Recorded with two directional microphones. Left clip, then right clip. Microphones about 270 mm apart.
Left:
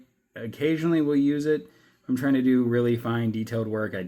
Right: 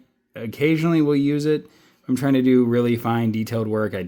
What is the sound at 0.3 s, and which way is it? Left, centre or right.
Speech, right.